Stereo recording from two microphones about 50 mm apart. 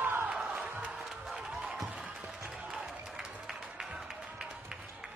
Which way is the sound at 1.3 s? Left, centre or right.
Centre.